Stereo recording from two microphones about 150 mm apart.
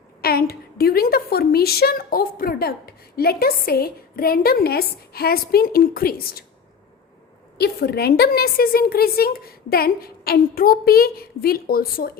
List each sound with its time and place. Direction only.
0.2 s a woman's voice: 90° left
7.6 s a woman's voice: 90° left